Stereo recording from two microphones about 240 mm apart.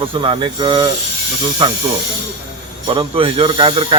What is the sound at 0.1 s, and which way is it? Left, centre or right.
Speech, right.